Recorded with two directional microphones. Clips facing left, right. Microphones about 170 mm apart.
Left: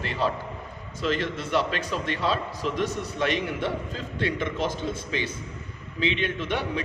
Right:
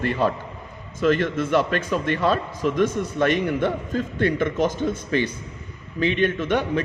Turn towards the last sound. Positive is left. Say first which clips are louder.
# right 7 dB
turn(degrees=-50)  # may be behind; listen again after turning